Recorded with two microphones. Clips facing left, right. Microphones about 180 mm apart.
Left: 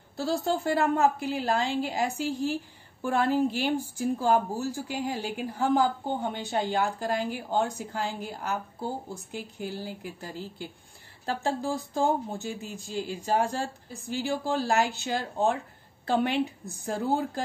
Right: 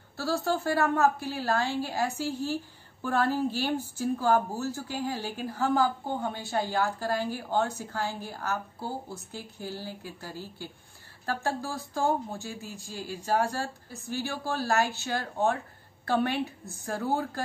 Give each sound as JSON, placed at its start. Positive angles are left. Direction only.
{"t": 0.1, "sound": "a woman's voice", "side_deg": 15}